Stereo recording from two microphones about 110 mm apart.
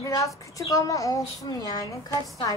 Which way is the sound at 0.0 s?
30° left (ahead or behind).